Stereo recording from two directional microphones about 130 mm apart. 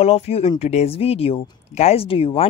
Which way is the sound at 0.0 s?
50° left (ahead or behind).